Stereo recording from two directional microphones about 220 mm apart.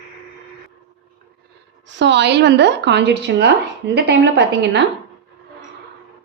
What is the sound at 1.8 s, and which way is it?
Speech, 55° right (ahead or behind).